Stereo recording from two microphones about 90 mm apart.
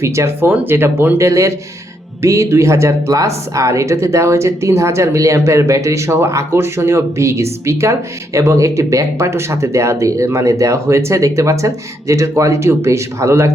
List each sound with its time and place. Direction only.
0.0 s a woman's voice: 30° right (ahead or behind)